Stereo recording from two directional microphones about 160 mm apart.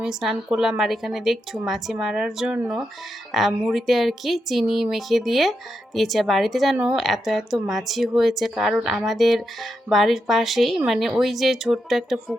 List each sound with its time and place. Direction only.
0.0 s speech: 5° right (ahead or behind)